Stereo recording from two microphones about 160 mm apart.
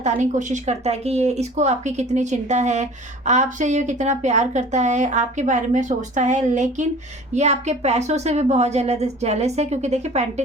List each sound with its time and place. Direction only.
0.0 s speech: 50° right (ahead or behind)